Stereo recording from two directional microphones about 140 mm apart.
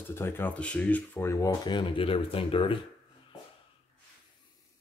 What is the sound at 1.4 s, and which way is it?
Speech, 30° left (ahead or behind).